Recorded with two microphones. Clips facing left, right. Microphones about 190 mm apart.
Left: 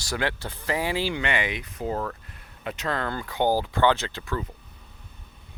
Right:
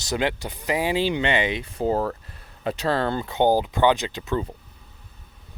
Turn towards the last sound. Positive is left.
turn(degrees=-20)  # may be behind; listen again after turning